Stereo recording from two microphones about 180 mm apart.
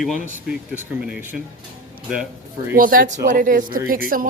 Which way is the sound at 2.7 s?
55° right (ahead or behind).